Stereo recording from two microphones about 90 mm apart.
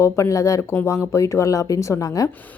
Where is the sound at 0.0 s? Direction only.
35° left (ahead or behind).